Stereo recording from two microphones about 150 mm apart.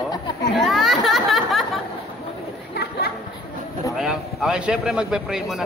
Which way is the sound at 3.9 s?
5° right (ahead or behind).